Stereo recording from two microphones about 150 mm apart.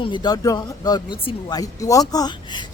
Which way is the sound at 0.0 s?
30° left (ahead or behind).